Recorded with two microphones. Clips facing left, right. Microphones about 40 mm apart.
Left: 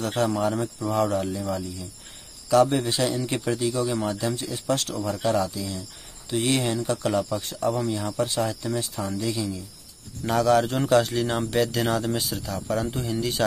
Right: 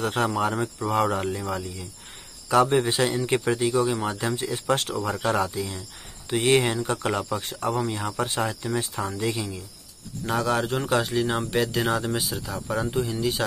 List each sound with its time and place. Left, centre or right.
0.0 s speech: right
2.9 s speech: right
3.2 s speech: centre
3.4 s speech: right
5.2 s speech: right
10.2 s speech: centre